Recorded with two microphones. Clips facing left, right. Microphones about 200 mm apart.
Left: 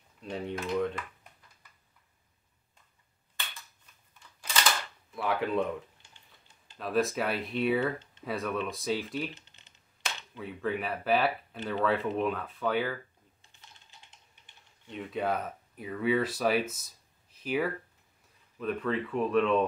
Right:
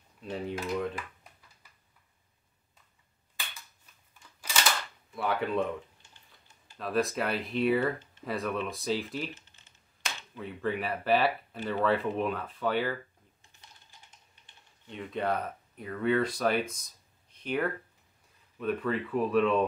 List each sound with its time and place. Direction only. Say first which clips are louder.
0.2 s speech: even; centre (ahead or behind)
5.1 s speech: even; centre (ahead or behind)
6.8 s speech: left 1 dB; centre (ahead or behind)
10.3 s speech: even; centre (ahead or behind)
15.0 s speech: even; centre (ahead or behind)